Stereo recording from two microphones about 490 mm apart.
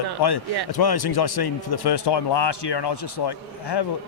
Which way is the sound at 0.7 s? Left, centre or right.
Left.